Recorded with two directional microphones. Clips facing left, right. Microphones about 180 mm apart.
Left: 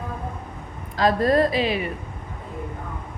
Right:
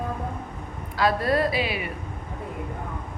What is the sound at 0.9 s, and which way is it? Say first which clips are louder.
Speech: left 4 dB; 40° left (ahead or behind).